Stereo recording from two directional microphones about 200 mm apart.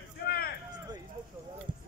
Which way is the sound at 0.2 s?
50° left (ahead or behind).